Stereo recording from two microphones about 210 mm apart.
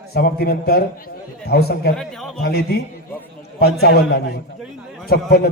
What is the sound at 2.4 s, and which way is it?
A man's voice, 50° left (ahead or behind).